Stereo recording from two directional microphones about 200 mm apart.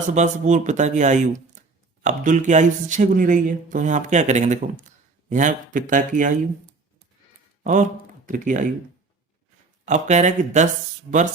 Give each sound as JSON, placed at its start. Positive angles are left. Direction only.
{"t": 0.1, "sound": "speech", "side_deg": -40}
{"t": 7.6, "sound": "speech", "side_deg": -40}
{"t": 9.8, "sound": "speech", "side_deg": -35}